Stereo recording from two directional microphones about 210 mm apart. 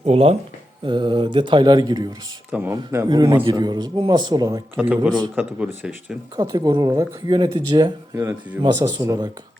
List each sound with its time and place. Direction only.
0.0 s speech: 30° right (ahead or behind); by 5.9 s 5° right (ahead or behind)
6.3 s speech: 20° right (ahead or behind)